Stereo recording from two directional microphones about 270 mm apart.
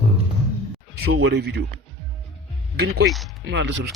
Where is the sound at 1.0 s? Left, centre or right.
Right.